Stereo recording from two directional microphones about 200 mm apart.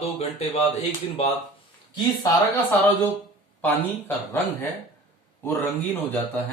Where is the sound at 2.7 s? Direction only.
10° left (ahead or behind).